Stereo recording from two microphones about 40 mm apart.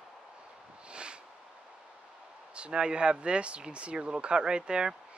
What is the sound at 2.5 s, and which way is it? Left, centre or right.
Speech, right.